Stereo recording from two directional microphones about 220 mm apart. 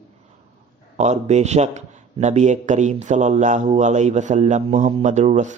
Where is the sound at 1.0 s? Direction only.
30° right (ahead or behind).